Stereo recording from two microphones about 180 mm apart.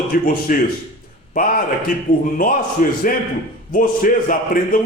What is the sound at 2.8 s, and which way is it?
A man's voice, 45° left (ahead or behind).